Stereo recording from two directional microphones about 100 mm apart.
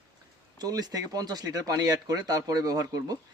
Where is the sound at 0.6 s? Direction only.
40° right (ahead or behind).